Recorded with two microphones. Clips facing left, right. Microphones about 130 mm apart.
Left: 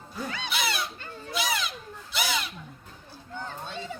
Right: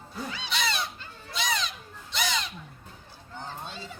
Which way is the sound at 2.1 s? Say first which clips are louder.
Even; 5° left (ahead or behind).